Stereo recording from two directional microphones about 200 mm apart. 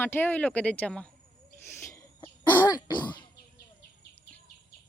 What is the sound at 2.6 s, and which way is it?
Throat clearing, 20° left (ahead or behind).